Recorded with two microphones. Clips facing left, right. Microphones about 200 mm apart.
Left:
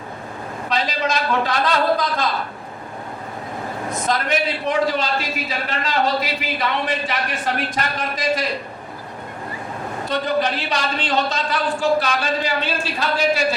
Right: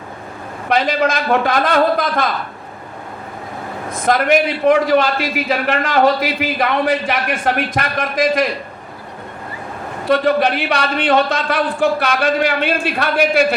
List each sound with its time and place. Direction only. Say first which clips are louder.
0.7 s a man's voice: right 6 dB; 55° right (ahead or behind)
4.0 s a man's voice: right 8 dB; 55° right (ahead or behind)
10.1 s a man's voice: right 7 dB; 65° right (ahead or behind)